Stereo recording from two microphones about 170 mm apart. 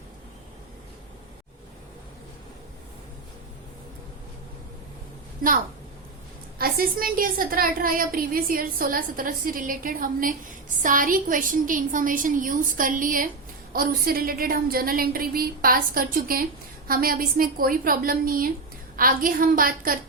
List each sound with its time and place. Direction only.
6.6 s a woman's voice: 60° right (ahead or behind)